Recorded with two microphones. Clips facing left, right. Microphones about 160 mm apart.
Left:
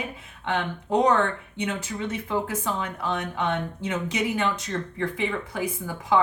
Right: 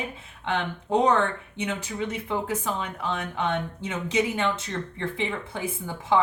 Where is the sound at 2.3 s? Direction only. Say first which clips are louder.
Left 2 dB; 20° right (ahead or behind).